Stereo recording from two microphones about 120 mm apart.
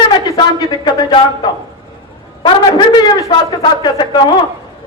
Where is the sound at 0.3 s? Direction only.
35° left (ahead or behind).